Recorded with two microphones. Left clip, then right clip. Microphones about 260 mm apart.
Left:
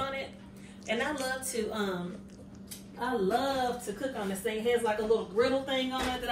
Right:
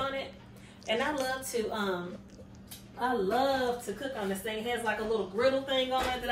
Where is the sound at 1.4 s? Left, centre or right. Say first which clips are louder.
Right 1 dB; right.